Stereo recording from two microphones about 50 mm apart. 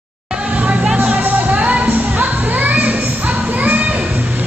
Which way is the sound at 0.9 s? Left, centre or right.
Right.